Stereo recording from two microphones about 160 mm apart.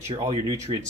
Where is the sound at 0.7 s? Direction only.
35° right (ahead or behind).